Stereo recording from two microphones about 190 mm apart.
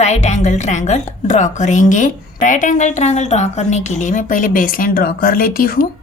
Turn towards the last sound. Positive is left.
turn(degrees=50)  # may be behind; listen again after turning